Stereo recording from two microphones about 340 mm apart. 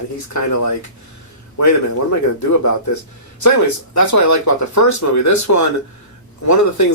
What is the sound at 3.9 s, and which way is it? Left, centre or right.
Speech, left.